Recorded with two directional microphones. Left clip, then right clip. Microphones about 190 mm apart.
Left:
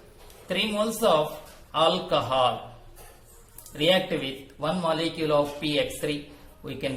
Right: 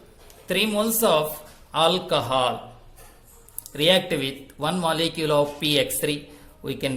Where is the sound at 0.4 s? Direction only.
50° right (ahead or behind).